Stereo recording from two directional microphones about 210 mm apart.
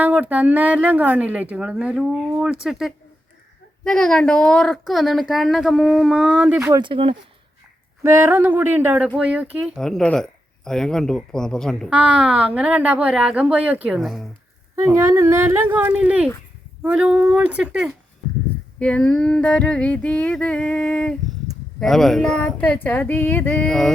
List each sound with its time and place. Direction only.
0.0 s speech: 5° right (ahead or behind)
6.8 s speech: 25° right (ahead or behind)
8.0 s speech: 10° right (ahead or behind)
14.9 s speech: 10° right (ahead or behind)